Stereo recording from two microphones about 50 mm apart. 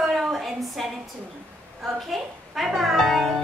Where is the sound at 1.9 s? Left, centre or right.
Centre.